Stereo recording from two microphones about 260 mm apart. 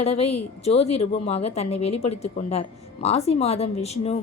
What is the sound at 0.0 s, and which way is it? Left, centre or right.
A woman's voice, left.